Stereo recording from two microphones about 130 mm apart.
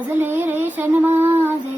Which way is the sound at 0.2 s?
15° right (ahead or behind).